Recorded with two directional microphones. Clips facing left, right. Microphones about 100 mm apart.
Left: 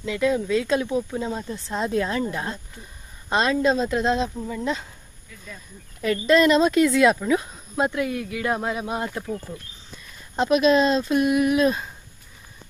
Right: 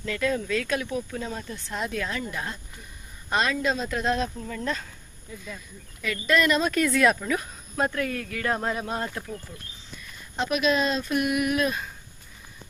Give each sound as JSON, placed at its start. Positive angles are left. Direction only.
{"t": 0.0, "sound": "speech", "side_deg": 15}
{"t": 5.3, "sound": "speech", "side_deg": -25}
{"t": 6.0, "sound": "speech", "side_deg": 30}
{"t": 10.3, "sound": "speech", "side_deg": 35}